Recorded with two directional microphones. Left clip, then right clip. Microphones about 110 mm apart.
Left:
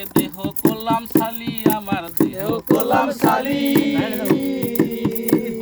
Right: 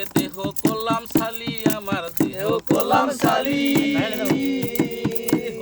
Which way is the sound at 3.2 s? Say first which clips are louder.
Left 2 dB; 25° right (ahead or behind).